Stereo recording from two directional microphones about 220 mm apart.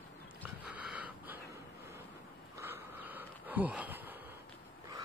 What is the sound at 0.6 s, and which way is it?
Wheeze, 5° right (ahead or behind).